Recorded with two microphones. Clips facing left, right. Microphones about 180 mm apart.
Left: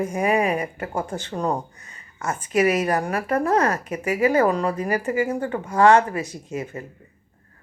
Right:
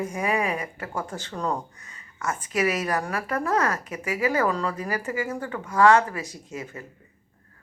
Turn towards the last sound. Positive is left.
turn(degrees=65)  # may be behind; listen again after turning